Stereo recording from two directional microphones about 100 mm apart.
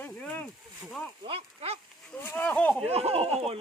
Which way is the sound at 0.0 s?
15° left (ahead or behind).